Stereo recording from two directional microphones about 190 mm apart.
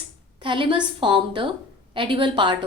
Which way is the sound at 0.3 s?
25° right (ahead or behind).